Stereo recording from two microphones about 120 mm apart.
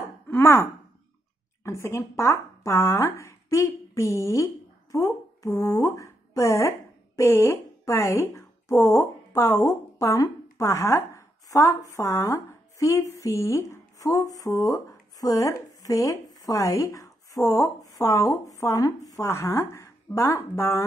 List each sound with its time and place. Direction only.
0.3 s a woman's voice: 20° left (ahead or behind)